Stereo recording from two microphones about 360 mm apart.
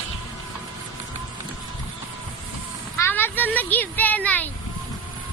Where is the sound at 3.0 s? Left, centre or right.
Centre.